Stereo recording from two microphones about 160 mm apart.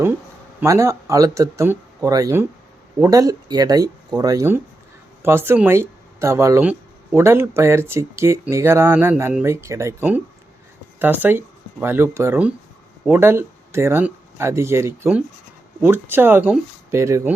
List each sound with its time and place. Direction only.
0.6 s speech: 20° right (ahead or behind)